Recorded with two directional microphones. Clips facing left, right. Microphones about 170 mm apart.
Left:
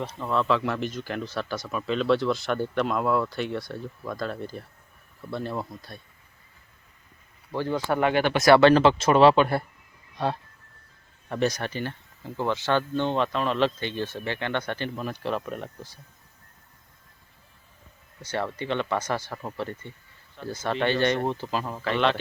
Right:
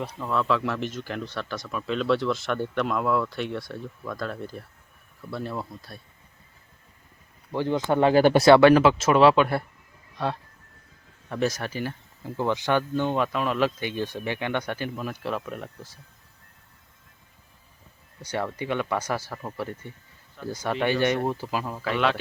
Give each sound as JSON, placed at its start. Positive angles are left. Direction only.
{"t": 0.2, "sound": "speech", "side_deg": 0}
{"t": 7.5, "sound": "speech", "side_deg": -20}
{"t": 8.4, "sound": "speech", "side_deg": -15}
{"t": 11.3, "sound": "speech", "side_deg": 0}
{"t": 18.2, "sound": "speech", "side_deg": -10}
{"t": 19.3, "sound": "speech", "side_deg": 5}
{"t": 19.5, "sound": "speech", "side_deg": -5}